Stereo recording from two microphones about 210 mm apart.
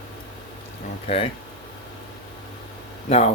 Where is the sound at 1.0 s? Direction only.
25° left (ahead or behind).